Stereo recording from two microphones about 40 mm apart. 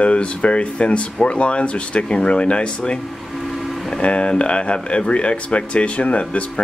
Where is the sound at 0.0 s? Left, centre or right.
Left.